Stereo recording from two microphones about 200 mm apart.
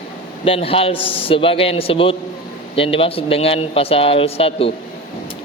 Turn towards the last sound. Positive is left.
turn(degrees=30)  # may be behind; listen again after turning